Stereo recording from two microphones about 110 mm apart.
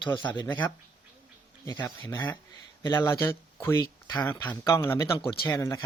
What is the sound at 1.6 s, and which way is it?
Speech, 30° left (ahead or behind).